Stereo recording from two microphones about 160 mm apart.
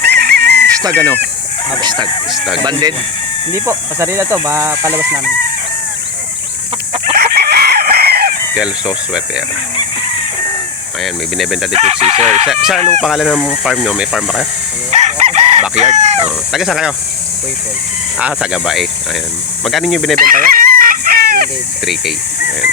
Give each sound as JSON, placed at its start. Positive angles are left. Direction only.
{"t": 0.0, "sound": "chicken", "side_deg": -90}
{"t": 0.9, "sound": "speech", "side_deg": 10}
{"t": 3.5, "sound": "speech", "side_deg": -15}
{"t": 7.2, "sound": "chicken", "side_deg": -75}
{"t": 8.5, "sound": "speech", "side_deg": -5}
{"t": 11.0, "sound": "speech", "side_deg": 0}
{"t": 11.7, "sound": "speech", "side_deg": -40}
{"t": 13.0, "sound": "speech", "side_deg": 0}
{"t": 14.8, "sound": "chicken", "side_deg": -45}
{"t": 16.5, "sound": "speech", "side_deg": 0}
{"t": 18.2, "sound": "speech", "side_deg": -5}
{"t": 20.1, "sound": "chicken", "side_deg": -60}
{"t": 22.4, "sound": "snake", "side_deg": 65}